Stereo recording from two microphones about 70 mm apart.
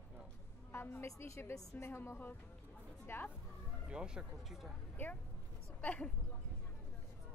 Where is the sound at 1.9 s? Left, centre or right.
Left.